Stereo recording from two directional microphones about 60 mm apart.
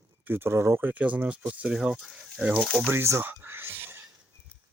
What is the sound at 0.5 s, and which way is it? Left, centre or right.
Speech, right.